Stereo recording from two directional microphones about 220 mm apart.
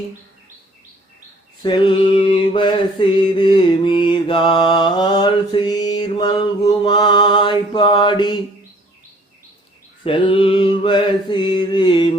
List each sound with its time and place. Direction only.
1.6 s mantra: 20° left (ahead or behind)
10.0 s mantra: 25° left (ahead or behind)